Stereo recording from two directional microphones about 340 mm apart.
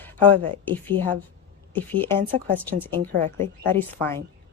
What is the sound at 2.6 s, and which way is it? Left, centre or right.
Speech, centre.